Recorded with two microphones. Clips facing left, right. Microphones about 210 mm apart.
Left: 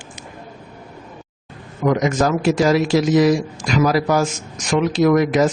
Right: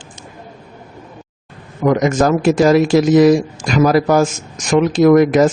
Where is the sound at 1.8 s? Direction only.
50° right (ahead or behind).